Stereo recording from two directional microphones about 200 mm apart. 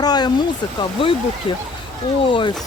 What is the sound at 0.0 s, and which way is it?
Speech, 20° left (ahead or behind).